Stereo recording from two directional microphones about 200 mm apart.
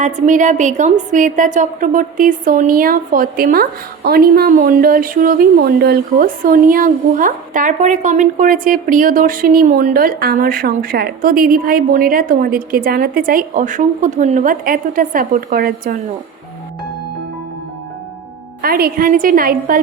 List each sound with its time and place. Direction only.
0.0 s a woman's voice: 40° right (ahead or behind)
18.6 s a woman's voice: 45° right (ahead or behind)